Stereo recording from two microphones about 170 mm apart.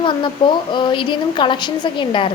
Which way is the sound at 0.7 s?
25° left (ahead or behind).